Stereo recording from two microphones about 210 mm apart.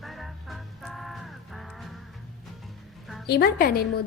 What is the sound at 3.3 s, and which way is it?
Speech, 50° left (ahead or behind).